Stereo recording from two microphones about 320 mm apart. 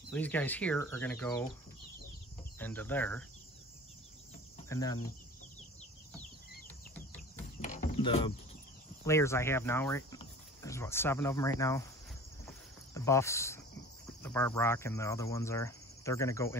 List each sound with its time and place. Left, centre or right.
0.1 s speech: centre
2.6 s speech: centre
4.6 s cricket: centre
7.6 s a sound: left
9.0 s speech: centre
12.4 s cricket: centre
14.0 s speech: centre